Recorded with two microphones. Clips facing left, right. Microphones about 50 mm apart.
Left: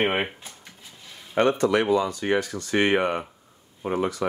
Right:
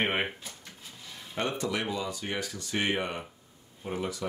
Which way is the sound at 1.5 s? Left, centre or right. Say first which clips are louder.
Left 12 dB; left.